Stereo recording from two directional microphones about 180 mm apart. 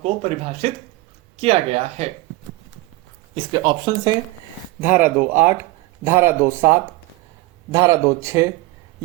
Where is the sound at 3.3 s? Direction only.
25° right (ahead or behind).